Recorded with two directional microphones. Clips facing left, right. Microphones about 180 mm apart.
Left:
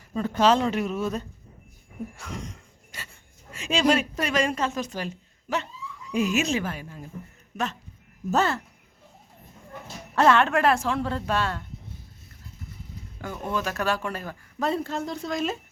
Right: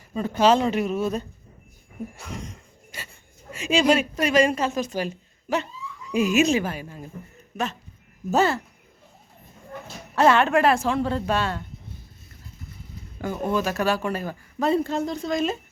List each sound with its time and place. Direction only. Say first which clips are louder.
0.2 s speech: right 2 dB; 5° right (ahead or behind)
3.5 s a woman's voice: right 3 dB; 5° right (ahead or behind)
10.2 s speech: right 2 dB; 5° right (ahead or behind)
13.5 s speech: right 3 dB; 5° right (ahead or behind)